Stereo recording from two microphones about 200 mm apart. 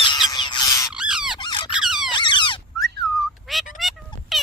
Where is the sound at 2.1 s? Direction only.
25° left (ahead or behind).